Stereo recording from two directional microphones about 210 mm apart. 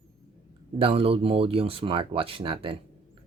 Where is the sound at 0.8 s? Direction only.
25° right (ahead or behind).